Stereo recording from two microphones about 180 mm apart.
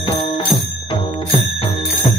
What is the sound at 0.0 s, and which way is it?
Music, 30° left (ahead or behind).